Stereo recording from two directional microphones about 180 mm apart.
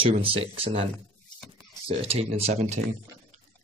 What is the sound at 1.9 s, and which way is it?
Speech, 35° right (ahead or behind).